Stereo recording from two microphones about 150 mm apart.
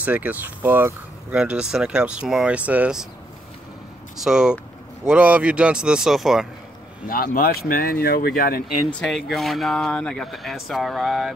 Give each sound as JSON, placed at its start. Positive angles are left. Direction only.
{"t": 0.0, "sound": "speech", "side_deg": -10}
{"t": 4.2, "sound": "speech", "side_deg": -5}
{"t": 7.1, "sound": "speech", "side_deg": 80}
{"t": 9.0, "sound": "speech", "side_deg": 0}